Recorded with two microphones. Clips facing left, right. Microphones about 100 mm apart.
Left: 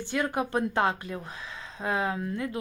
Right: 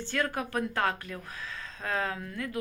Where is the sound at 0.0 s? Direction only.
15° left (ahead or behind).